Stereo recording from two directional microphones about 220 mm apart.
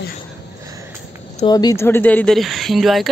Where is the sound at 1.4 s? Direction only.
15° left (ahead or behind); by 3.1 s centre (ahead or behind).